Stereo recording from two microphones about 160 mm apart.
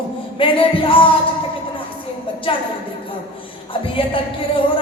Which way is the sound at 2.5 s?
35° left (ahead or behind).